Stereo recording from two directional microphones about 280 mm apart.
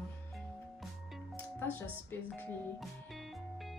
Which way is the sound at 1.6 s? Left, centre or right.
Centre.